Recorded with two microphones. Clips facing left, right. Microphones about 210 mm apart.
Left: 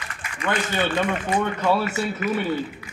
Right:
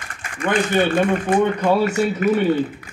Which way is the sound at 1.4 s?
15° right (ahead or behind).